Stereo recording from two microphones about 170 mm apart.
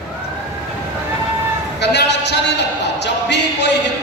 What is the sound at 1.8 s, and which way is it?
A man's voice, 85° left.